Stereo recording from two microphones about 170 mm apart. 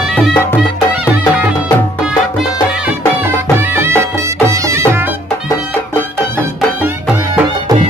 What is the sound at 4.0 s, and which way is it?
Music, 15° right (ahead or behind).